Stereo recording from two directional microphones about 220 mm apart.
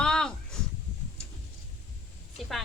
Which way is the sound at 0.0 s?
5° left (ahead or behind).